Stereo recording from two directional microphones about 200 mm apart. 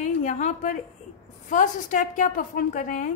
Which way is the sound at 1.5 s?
40° left (ahead or behind).